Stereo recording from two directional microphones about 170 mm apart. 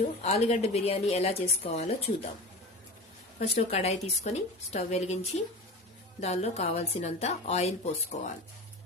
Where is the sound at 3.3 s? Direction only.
40° left (ahead or behind).